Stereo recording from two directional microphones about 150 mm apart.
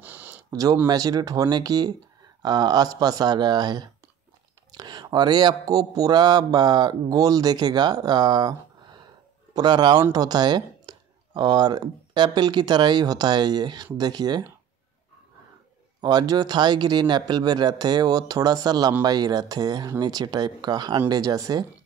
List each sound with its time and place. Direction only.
0.0 s a sound: 10° right (ahead or behind)
0.5 s a man's voice: 25° right (ahead or behind)
16.0 s a man's voice: 30° right (ahead or behind)